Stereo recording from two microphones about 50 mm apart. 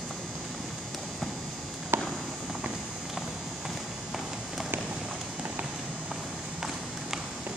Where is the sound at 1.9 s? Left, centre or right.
Right.